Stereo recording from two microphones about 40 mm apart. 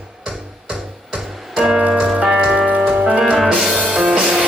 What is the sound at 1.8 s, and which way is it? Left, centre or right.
Music, right.